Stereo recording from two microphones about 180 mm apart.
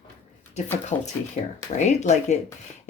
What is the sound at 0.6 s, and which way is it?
Speech, 40° left (ahead or behind).